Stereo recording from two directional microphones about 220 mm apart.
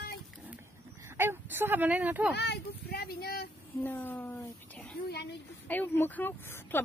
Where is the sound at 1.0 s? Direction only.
10° right (ahead or behind).